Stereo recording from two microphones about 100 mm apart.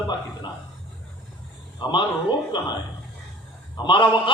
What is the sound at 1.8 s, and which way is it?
Speech, 50° left (ahead or behind).